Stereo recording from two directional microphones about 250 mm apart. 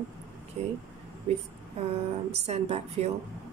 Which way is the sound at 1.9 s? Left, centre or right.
Right.